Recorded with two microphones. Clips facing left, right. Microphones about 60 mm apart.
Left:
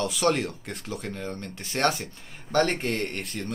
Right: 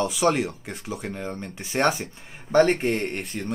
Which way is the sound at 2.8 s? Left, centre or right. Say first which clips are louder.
Right 4 dB; centre.